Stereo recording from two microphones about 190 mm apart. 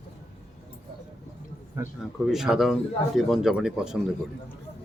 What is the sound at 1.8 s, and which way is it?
Speech, 15° right (ahead or behind).